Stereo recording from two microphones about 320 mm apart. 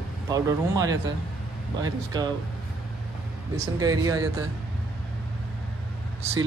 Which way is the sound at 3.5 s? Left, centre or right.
Centre.